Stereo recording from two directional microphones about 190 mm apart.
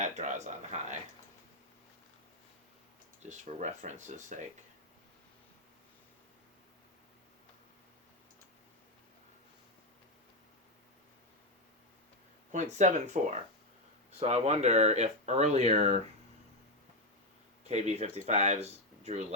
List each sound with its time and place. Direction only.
0.0 s speech: 40° right (ahead or behind)
3.2 s speech: 40° right (ahead or behind)
12.5 s speech: 40° right (ahead or behind)
14.2 s speech: 35° right (ahead or behind)
17.6 s speech: 35° right (ahead or behind)